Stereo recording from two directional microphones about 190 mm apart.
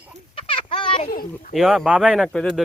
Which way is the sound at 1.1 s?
50° left (ahead or behind).